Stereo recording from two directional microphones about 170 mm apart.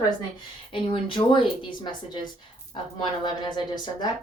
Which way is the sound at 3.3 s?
25° left (ahead or behind).